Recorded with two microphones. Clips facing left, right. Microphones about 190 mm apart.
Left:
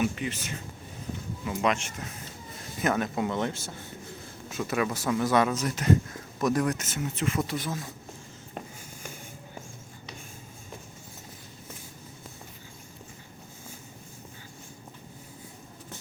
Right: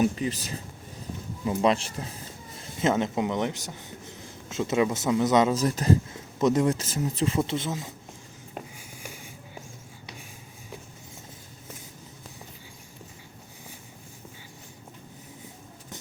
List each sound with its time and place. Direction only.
0.0 s speech: 35° right (ahead or behind); by 5.5 s 20° right (ahead or behind)
5.5 s speech: 35° right (ahead or behind)
6.1 s speech: 20° right (ahead or behind)